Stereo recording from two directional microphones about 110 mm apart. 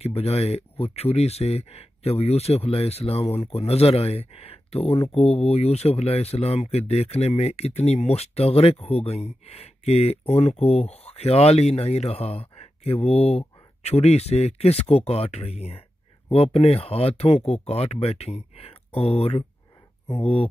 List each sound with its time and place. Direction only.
0.0 s speech: 70° left (ahead or behind)